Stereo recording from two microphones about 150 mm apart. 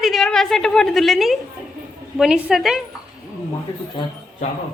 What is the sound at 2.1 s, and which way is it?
Speech, 5° right (ahead or behind).